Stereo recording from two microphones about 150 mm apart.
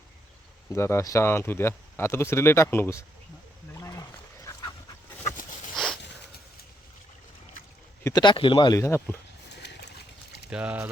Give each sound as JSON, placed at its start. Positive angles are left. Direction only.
{"t": 0.7, "sound": "speech", "side_deg": 15}
{"t": 3.8, "sound": "wild animals", "side_deg": 20}
{"t": 5.7, "sound": "a sound", "side_deg": 5}
{"t": 8.0, "sound": "speech", "side_deg": 30}
{"t": 8.8, "sound": "speech", "side_deg": 15}
{"t": 9.8, "sound": "a sound", "side_deg": 90}
{"t": 10.5, "sound": "speech", "side_deg": -10}